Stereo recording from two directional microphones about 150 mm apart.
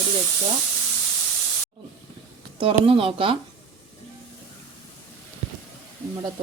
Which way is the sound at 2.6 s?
35° right (ahead or behind).